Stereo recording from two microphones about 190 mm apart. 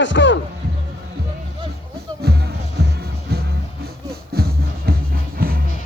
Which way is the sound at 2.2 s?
60° right (ahead or behind).